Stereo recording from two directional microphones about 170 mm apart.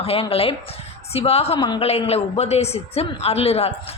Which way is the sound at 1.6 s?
25° left (ahead or behind).